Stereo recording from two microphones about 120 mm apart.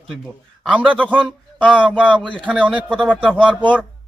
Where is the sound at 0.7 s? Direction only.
10° right (ahead or behind).